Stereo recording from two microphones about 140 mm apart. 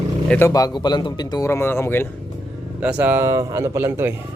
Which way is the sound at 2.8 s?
10° right (ahead or behind).